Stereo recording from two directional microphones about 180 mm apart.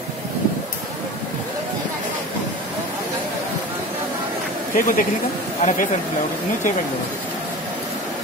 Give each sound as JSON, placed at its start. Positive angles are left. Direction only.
{"t": 4.7, "sound": "speech", "side_deg": 50}